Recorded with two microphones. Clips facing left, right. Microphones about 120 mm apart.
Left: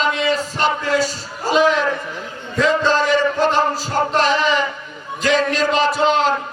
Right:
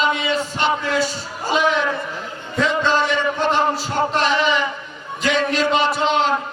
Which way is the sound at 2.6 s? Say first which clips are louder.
Left 2 dB; 35° left (ahead or behind).